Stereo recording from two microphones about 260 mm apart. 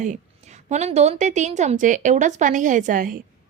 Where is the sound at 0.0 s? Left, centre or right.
Right.